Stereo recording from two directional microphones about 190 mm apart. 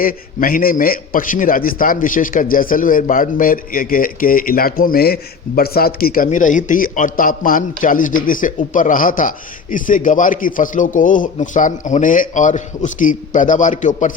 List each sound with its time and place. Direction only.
0.0 s a man's voice: 50° left (ahead or behind)